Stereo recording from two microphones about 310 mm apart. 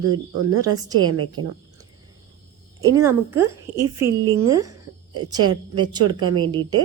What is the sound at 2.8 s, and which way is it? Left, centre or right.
A woman's voice, centre.